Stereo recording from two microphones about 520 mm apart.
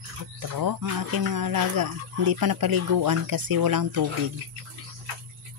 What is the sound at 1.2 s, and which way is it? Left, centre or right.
Speech, right.